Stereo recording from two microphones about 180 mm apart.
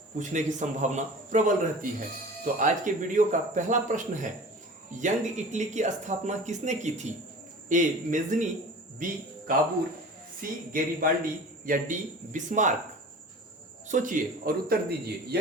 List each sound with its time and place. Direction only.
0.2 s speech: 40° right (ahead or behind)
10.4 s speech: 50° right (ahead or behind)
13.8 s speech: 45° right (ahead or behind)